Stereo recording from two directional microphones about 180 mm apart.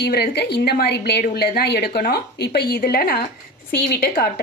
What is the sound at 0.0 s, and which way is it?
A woman's voice, 65° left (ahead or behind).